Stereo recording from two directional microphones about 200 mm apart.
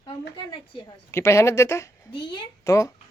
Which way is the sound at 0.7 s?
15° left (ahead or behind).